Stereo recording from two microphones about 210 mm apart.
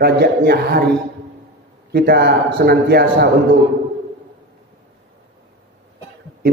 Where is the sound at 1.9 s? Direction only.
50° right (ahead or behind).